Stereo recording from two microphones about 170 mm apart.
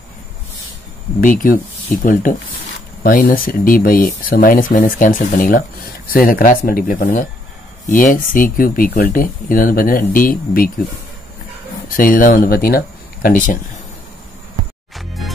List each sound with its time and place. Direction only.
1.2 s speech: 50° left (ahead or behind)
11.9 s speech: 55° left (ahead or behind)
15.0 s music: centre (ahead or behind)